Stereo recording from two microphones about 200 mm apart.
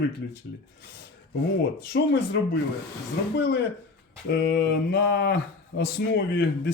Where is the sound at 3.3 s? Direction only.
55° left (ahead or behind).